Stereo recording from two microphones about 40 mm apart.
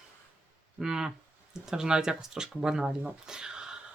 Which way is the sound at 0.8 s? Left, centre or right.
Centre.